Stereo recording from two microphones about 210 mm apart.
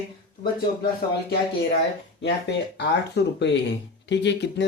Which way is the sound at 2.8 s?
55° left (ahead or behind).